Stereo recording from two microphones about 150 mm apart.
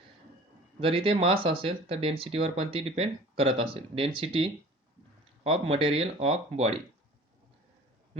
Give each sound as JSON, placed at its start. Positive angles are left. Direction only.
{"t": 0.8, "sound": "speech", "side_deg": -40}